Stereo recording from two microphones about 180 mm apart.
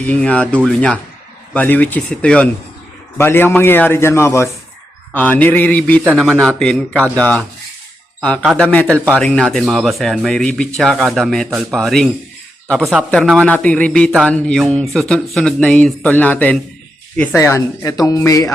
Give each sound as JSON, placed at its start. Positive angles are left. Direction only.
{"t": 0.1, "sound": "a man's voice", "side_deg": 5}